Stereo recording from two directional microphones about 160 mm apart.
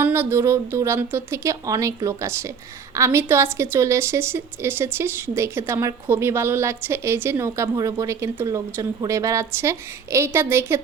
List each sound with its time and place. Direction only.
0.0 s a woman's voice: 10° right (ahead or behind)